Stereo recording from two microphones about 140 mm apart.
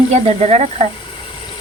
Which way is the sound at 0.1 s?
50° right (ahead or behind).